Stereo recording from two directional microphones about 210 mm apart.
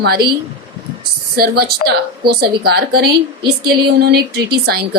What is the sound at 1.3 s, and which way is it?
Speech, 45° right (ahead or behind).